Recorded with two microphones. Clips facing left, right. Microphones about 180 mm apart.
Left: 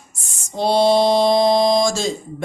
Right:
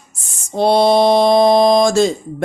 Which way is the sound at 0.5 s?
60° right (ahead or behind).